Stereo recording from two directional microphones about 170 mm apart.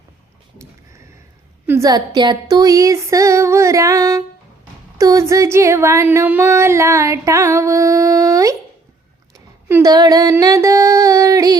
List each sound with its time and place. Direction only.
1.6 s female singing: 15° right (ahead or behind)
4.9 s speech: 20° right (ahead or behind)
9.3 s female singing: 15° right (ahead or behind)